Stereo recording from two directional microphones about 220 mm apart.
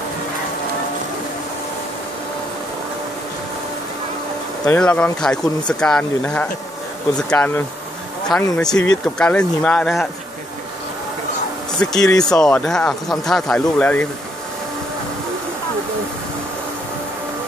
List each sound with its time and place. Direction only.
4.6 s speech: 5° left (ahead or behind)
11.8 s speech: 5° left (ahead or behind)